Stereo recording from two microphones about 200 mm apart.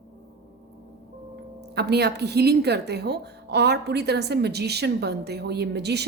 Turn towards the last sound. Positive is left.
turn(degrees=-55)  # may be behind; listen again after turning